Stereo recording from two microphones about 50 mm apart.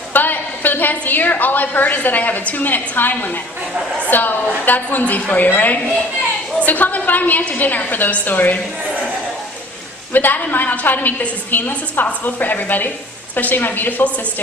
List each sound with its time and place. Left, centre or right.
0.1 s a woman's voice: left
10.1 s a woman's voice: left